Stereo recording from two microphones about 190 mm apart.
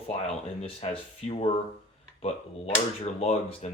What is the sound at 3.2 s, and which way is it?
Speech, 35° left (ahead or behind).